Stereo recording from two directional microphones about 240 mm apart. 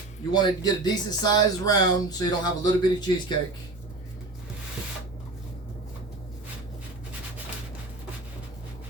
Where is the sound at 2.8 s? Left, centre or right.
Centre.